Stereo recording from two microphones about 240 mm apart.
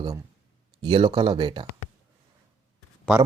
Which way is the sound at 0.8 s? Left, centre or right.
Right.